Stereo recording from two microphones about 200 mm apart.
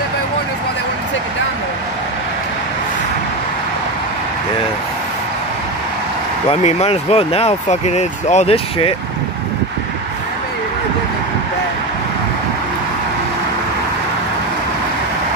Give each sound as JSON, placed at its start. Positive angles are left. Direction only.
{"t": 6.5, "sound": "speech", "side_deg": 30}